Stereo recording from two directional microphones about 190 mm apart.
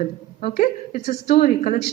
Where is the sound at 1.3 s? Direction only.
50° left (ahead or behind).